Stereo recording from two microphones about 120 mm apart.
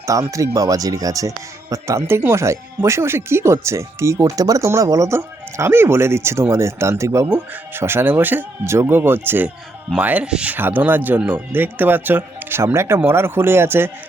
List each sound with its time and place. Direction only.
0.0 s speech: 25° right (ahead or behind)